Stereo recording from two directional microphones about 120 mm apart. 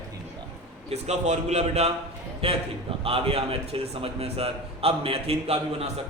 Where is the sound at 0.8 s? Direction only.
65° right (ahead or behind).